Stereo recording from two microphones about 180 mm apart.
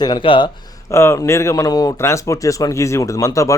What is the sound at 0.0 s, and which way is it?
Speech, 25° left (ahead or behind).